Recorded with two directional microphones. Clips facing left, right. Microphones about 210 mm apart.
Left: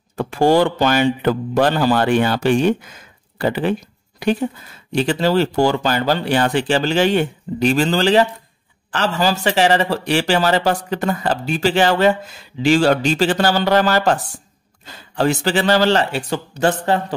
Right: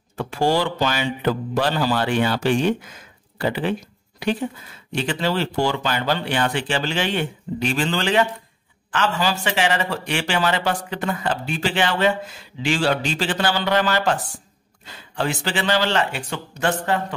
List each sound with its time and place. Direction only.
0.1 s speech: 50° left (ahead or behind)
4.9 s speech: 40° left (ahead or behind)
15.1 s speech: 40° left (ahead or behind)